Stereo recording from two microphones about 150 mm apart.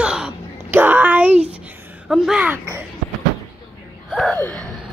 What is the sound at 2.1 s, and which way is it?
Speech, 5° right (ahead or behind).